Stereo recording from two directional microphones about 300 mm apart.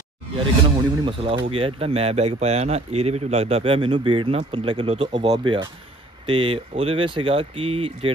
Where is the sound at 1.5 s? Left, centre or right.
Centre.